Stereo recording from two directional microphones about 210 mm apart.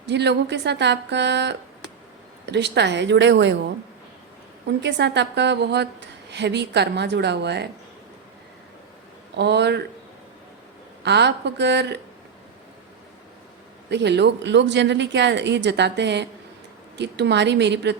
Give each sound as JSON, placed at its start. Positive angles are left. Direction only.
{"t": 0.0, "sound": "speech", "side_deg": -55}
{"t": 4.8, "sound": "a woman's voice", "side_deg": -55}
{"t": 9.3, "sound": "a woman's voice", "side_deg": -55}
{"t": 11.0, "sound": "speech", "side_deg": -55}
{"t": 13.9, "sound": "speech", "side_deg": -55}